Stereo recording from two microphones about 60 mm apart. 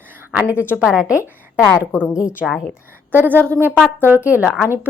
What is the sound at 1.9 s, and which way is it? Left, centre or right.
Speech, left.